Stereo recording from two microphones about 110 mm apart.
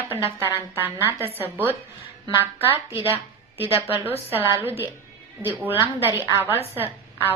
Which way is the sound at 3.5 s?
20° right (ahead or behind).